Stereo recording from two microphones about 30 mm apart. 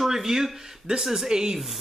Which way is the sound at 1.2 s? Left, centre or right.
Right.